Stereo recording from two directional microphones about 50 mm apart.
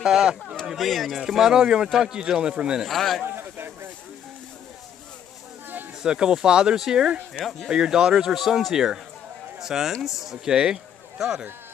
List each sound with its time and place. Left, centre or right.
0.0 s speech: centre
2.9 s speech: centre
3.3 s a sound: right
6.0 s speech: centre
8.7 s speech: centre
10.5 s speech: centre